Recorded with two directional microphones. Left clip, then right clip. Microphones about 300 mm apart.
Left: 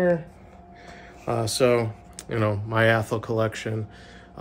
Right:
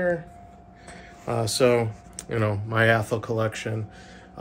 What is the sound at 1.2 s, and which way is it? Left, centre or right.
Speech, centre.